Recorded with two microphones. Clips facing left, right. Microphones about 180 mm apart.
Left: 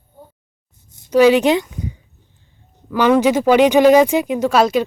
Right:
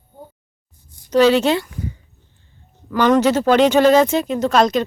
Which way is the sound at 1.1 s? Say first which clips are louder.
Left 2 dB; 10° left (ahead or behind).